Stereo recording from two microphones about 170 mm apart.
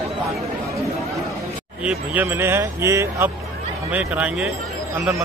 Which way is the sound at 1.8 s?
10° right (ahead or behind).